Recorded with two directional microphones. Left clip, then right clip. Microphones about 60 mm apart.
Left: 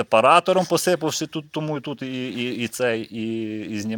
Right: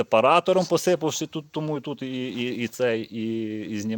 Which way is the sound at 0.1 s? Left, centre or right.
Right.